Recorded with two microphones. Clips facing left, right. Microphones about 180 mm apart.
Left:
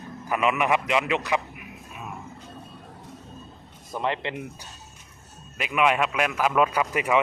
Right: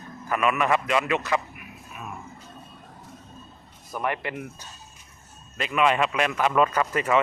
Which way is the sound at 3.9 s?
25° left (ahead or behind).